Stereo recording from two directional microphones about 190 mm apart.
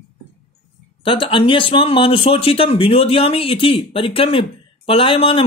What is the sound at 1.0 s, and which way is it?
Speech, 25° left (ahead or behind).